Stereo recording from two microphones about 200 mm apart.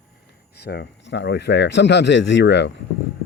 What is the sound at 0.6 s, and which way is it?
Speech, 55° left (ahead or behind).